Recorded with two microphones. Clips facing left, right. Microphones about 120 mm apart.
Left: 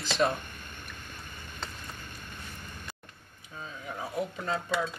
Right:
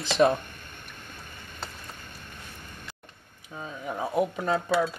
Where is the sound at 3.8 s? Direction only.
45° right (ahead or behind).